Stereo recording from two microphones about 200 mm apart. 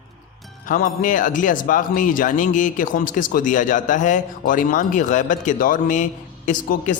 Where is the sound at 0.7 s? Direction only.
40° left (ahead or behind).